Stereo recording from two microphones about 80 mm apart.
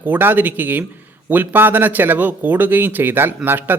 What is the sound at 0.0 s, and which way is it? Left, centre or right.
A man's voice, right.